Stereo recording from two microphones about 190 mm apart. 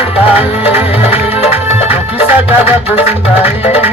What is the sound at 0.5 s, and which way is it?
Music, 10° right (ahead or behind).